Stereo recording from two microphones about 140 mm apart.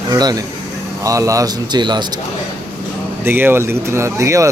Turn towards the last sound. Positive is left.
turn(degrees=-20)  # may be behind; listen again after turning